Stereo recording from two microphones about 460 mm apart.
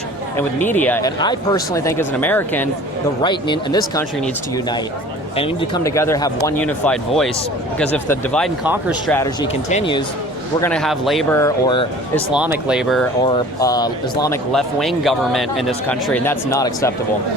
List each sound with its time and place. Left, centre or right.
0.3 s speech: centre
10.6 s speech: centre
12.3 s speech: centre